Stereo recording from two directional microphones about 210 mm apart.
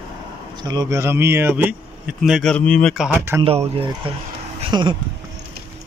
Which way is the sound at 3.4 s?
25° right (ahead or behind).